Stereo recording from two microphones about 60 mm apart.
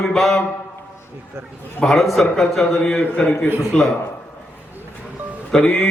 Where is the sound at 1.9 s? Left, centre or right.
Centre.